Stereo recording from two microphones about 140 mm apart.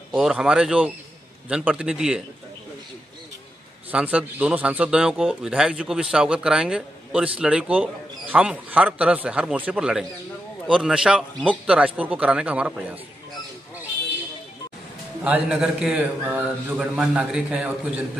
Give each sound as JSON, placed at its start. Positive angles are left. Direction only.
{"t": 0.1, "sound": "speech", "side_deg": -5}
{"t": 3.9, "sound": "speech", "side_deg": -10}
{"t": 15.2, "sound": "speech", "side_deg": -5}